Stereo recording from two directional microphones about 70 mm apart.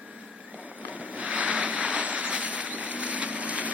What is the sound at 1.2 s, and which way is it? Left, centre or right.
Vehicle, centre.